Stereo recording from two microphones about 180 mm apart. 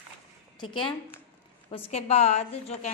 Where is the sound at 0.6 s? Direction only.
25° left (ahead or behind).